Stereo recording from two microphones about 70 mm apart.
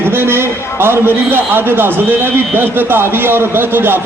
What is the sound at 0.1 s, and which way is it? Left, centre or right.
A man's voice, right.